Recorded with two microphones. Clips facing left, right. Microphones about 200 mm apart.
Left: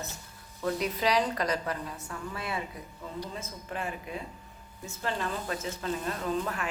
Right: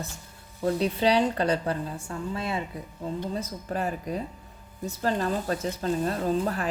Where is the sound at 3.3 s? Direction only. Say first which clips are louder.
Right 7 dB; 35° right (ahead or behind).